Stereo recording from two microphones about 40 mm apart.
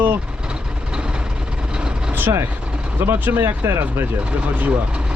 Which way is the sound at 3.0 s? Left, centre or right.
Right.